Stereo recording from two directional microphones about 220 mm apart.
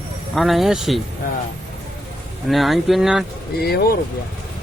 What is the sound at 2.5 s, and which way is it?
Speech, centre (ahead or behind).